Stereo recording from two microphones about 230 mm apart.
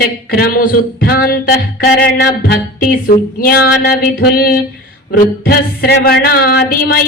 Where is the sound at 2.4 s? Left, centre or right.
Left.